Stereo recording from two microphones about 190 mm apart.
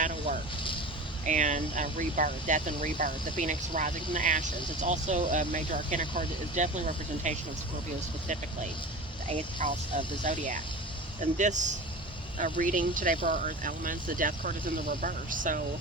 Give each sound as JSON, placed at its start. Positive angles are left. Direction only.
{"t": 0.0, "sound": "vehicle", "side_deg": -45}
{"t": 1.3, "sound": "speech", "side_deg": -40}
{"t": 9.6, "sound": "speech", "side_deg": -40}